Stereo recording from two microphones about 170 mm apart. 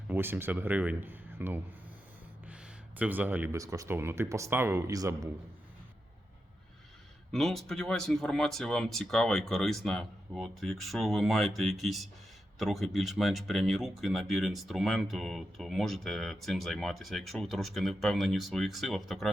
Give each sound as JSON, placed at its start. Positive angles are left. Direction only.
{"t": 0.1, "sound": "speech", "side_deg": -10}
{"t": 3.0, "sound": "speech", "side_deg": -10}
{"t": 7.3, "sound": "speech", "side_deg": 0}